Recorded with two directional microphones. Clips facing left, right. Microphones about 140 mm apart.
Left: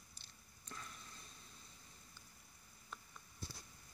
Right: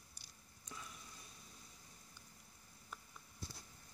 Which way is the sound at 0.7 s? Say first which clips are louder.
Even; 10° right (ahead or behind).